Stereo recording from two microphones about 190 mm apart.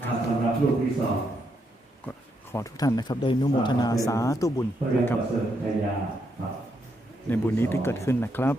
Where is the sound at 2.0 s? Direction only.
15° left (ahead or behind).